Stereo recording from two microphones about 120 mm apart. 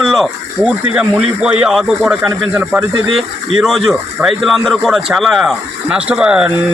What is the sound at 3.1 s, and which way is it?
Speech, centre (ahead or behind).